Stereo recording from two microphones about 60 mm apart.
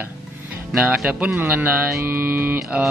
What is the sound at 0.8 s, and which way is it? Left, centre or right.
A man's voice, right.